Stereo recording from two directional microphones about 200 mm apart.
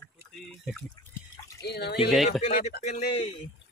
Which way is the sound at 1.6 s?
55° left (ahead or behind).